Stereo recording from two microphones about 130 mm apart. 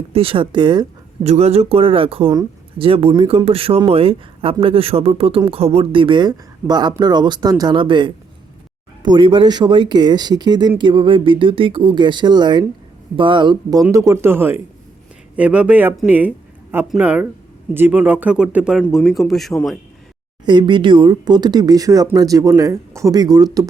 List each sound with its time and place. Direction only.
0.1 s speech: 45° right (ahead or behind)
1.2 s speech: 55° right (ahead or behind); by 19.8 s centre (ahead or behind)
20.4 s speech: 35° right (ahead or behind)